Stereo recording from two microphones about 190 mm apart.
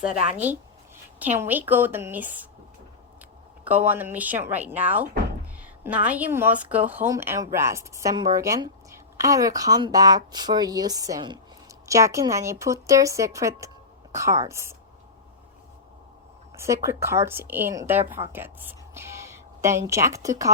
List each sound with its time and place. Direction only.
0.2 s speech: 35° right (ahead or behind)
1.2 s a woman's voice: 10° right (ahead or behind)
3.6 s a woman's voice: 10° right (ahead or behind)
16.6 s a woman's voice: 15° right (ahead or behind)